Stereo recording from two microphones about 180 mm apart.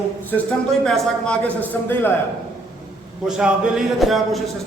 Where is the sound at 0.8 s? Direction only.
5° left (ahead or behind).